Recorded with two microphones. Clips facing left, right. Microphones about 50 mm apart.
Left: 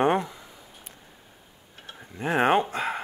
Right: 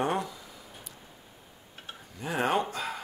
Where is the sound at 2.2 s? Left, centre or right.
Left.